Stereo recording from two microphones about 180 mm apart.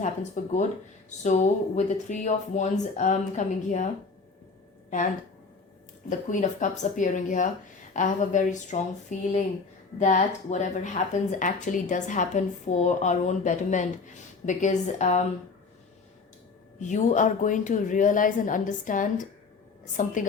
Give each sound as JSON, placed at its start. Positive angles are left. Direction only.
{"t": 0.0, "sound": "speech", "side_deg": 40}
{"t": 6.1, "sound": "speech", "side_deg": 45}
{"t": 16.8, "sound": "speech", "side_deg": 45}